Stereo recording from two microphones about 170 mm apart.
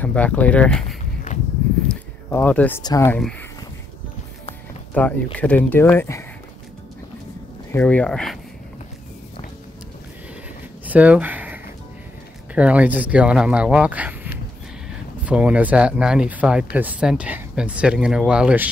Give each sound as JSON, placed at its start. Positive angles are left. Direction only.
{"t": 0.0, "sound": "speech", "side_deg": 10}
{"t": 2.2, "sound": "speech", "side_deg": 10}
{"t": 2.8, "sound": "speech", "side_deg": 20}
{"t": 3.1, "sound": "speech", "side_deg": 5}
{"t": 4.9, "sound": "speech", "side_deg": 10}
{"t": 7.7, "sound": "speech", "side_deg": 10}
{"t": 10.9, "sound": "speech", "side_deg": -10}